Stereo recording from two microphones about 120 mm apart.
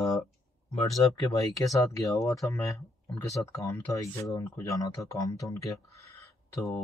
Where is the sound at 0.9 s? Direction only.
30° left (ahead or behind).